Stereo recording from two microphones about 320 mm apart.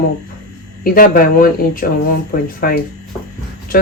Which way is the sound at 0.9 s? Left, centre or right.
Left.